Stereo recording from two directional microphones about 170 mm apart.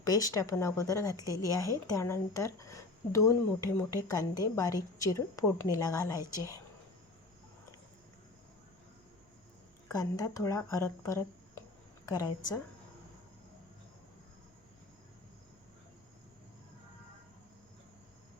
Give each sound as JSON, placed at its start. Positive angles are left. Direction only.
{"t": 0.0, "sound": "speech", "side_deg": 20}
{"t": 9.9, "sound": "a woman's voice", "side_deg": 20}